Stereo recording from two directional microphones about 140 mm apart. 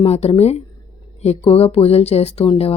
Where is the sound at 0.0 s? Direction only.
50° left (ahead or behind).